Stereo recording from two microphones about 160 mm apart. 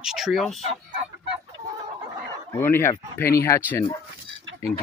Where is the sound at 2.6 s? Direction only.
15° left (ahead or behind).